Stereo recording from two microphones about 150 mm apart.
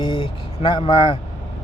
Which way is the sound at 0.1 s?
35° left (ahead or behind).